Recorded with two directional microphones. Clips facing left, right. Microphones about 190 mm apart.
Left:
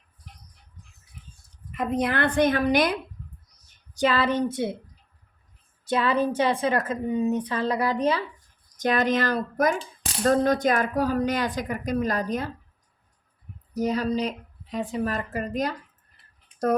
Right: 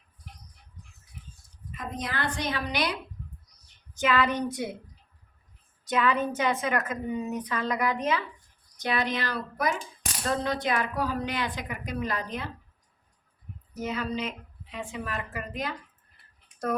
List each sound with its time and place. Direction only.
1.7 s a woman's voice: 60° left (ahead or behind)
3.9 s a woman's voice: 35° left (ahead or behind)
5.8 s a woman's voice: 30° left (ahead or behind)
8.8 s speech: 45° left (ahead or behind)
13.7 s a woman's voice: 40° left (ahead or behind)